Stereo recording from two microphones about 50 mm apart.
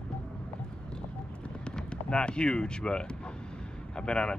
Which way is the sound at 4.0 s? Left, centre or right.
Centre.